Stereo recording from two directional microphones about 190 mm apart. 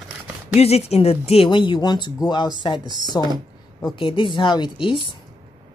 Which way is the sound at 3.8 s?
25° left (ahead or behind).